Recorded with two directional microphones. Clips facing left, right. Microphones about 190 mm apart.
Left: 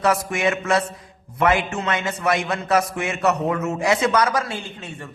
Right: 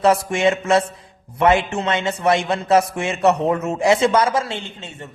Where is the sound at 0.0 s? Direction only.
30° right (ahead or behind).